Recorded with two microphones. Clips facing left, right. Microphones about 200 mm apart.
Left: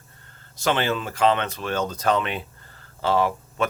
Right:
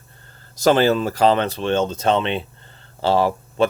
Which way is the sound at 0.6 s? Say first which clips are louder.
Right 8 dB; 40° right (ahead or behind).